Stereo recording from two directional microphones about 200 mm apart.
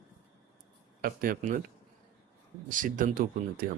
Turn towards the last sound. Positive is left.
turn(degrees=-45)  # may be behind; listen again after turning